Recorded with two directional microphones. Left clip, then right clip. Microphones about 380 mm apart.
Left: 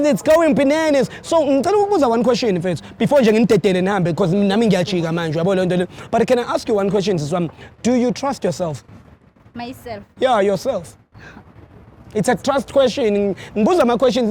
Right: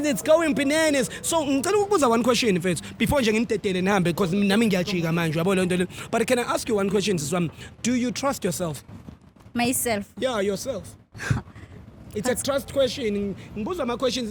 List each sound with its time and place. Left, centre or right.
0.0 s speech: centre
3.4 s speech: centre
3.8 s speech: centre
9.6 s speech: right
10.2 s speech: centre
11.2 s a sound: right
12.1 s speech: centre
13.8 s speech: centre